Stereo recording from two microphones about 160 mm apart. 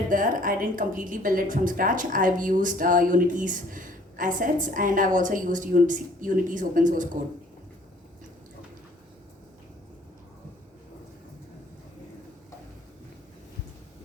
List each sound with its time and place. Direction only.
0.1 s a woman's voice: 55° right (ahead or behind)